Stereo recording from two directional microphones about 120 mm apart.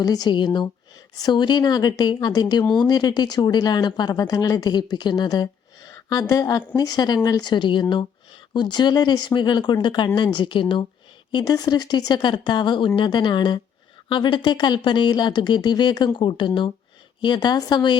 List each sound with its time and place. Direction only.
0.0 s a woman's voice: 35° left (ahead or behind)